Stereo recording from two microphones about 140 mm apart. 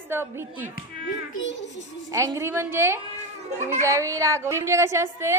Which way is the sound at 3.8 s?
20° right (ahead or behind).